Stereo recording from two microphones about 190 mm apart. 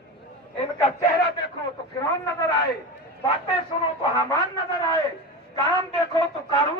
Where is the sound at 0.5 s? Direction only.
30° left (ahead or behind).